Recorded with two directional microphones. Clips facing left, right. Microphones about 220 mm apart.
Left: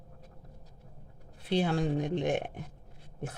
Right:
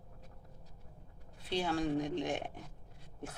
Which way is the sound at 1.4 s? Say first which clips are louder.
Left 5 dB; 55° left (ahead or behind).